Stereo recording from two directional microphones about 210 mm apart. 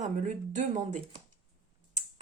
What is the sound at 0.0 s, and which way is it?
Speech, 35° right (ahead or behind).